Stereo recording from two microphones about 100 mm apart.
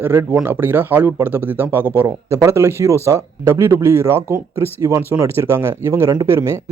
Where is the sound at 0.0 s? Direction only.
25° right (ahead or behind).